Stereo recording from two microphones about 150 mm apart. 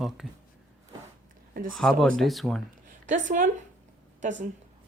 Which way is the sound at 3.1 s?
55° right (ahead or behind).